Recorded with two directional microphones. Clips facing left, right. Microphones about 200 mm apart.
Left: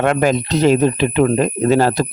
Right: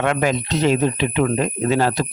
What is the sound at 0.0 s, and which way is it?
Speech, 40° left (ahead or behind).